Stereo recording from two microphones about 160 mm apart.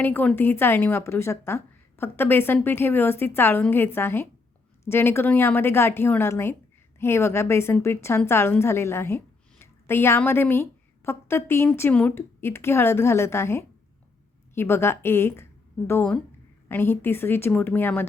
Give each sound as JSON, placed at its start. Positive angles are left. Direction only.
{"t": 0.0, "sound": "a woman's voice", "side_deg": 10}
{"t": 16.6, "sound": "speech", "side_deg": 15}